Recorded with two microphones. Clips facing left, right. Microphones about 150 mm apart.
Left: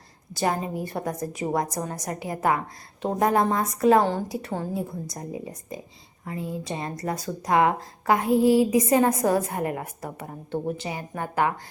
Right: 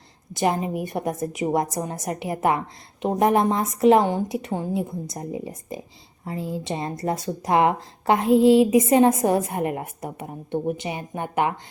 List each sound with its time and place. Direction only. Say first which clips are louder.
0.3 s speech: right 3 dB; 20° right (ahead or behind)